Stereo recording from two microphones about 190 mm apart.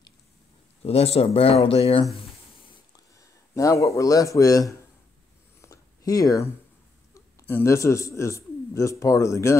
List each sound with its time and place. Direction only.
0.8 s speech: 30° left (ahead or behind)
3.2 s a man's voice: 15° left (ahead or behind)
5.6 s a sound: 20° left (ahead or behind)
7.2 s a man's voice: 15° left (ahead or behind)